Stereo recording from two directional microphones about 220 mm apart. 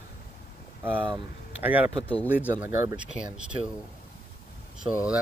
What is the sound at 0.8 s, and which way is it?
Speech, 10° right (ahead or behind).